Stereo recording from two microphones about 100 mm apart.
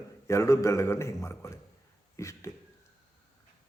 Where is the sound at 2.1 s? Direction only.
30° left (ahead or behind).